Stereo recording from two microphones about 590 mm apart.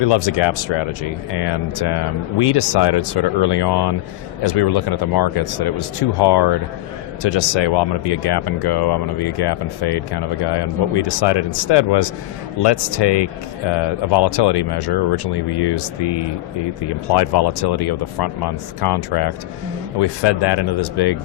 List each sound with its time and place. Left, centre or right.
0.0 s speech: left